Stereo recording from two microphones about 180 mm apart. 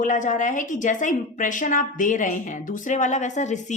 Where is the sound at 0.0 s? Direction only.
45° left (ahead or behind).